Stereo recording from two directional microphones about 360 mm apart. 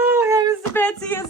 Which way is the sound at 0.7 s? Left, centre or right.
Centre.